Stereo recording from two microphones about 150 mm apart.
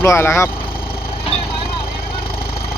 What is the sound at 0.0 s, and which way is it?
Speech, 15° left (ahead or behind).